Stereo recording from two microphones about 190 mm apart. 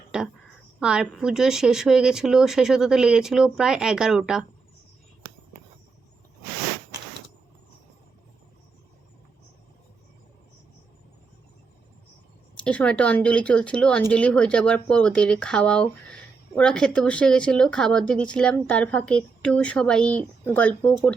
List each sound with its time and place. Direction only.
0.1 s a sound: 5° right (ahead or behind)
0.8 s speech: 5° right (ahead or behind)
12.5 s speech: 5° left (ahead or behind)